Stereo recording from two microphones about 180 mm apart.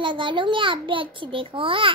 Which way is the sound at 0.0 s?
25° right (ahead or behind).